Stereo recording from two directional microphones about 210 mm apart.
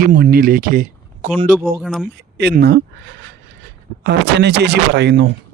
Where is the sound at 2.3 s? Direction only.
50° right (ahead or behind).